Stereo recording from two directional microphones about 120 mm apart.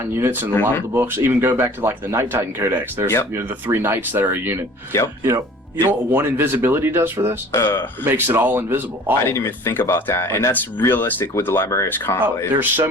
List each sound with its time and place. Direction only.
0.2 s speech: 15° right (ahead or behind)
7.5 s speech: 20° left (ahead or behind)
8.0 s speech: 15° right (ahead or behind)
9.2 s speech: 20° left (ahead or behind)
12.5 s speech: 15° right (ahead or behind)